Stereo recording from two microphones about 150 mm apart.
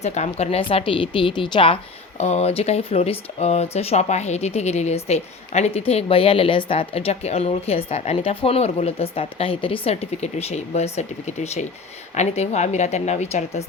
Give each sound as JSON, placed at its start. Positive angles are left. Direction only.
{"t": 0.0, "sound": "speech", "side_deg": 50}